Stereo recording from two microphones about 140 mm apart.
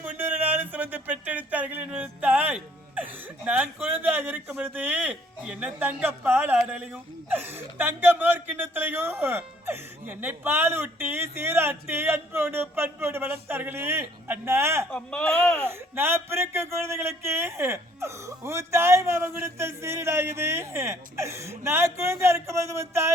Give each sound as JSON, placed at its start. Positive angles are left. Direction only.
{"t": 0.0, "sound": "a sound", "side_deg": -15}
{"t": 6.0, "sound": "speech", "side_deg": -15}
{"t": 14.8, "sound": "speech", "side_deg": 5}
{"t": 15.6, "sound": "speech", "side_deg": -15}